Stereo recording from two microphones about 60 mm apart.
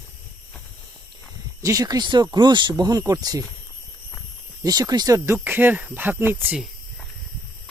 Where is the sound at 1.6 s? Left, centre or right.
Right.